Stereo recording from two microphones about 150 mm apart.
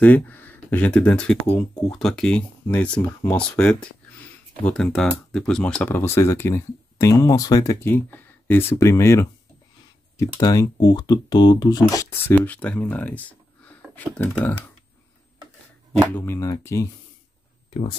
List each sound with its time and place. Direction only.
0.0 s speech: 10° left (ahead or behind)
12.4 s speech: 10° left (ahead or behind)
16.1 s speech: 15° left (ahead or behind)
17.6 s speech: 35° left (ahead or behind)